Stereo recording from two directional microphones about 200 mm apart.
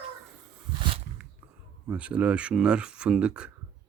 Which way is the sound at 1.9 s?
5° right (ahead or behind).